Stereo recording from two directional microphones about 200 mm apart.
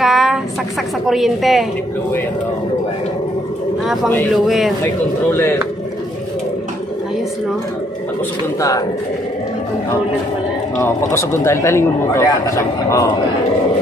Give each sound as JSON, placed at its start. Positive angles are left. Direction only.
{"t": 0.0, "sound": "a sound", "side_deg": 0}
{"t": 1.0, "sound": "a woman's voice", "side_deg": 0}
{"t": 3.8, "sound": "a man's voice", "side_deg": -5}
{"t": 5.3, "sound": "speech", "side_deg": 10}
{"t": 8.5, "sound": "speech", "side_deg": 15}
{"t": 10.8, "sound": "speech", "side_deg": 15}